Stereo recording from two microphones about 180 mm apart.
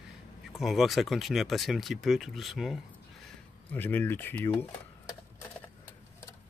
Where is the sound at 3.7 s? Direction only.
10° left (ahead or behind).